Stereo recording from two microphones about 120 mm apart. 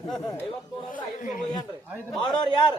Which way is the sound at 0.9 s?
90° left.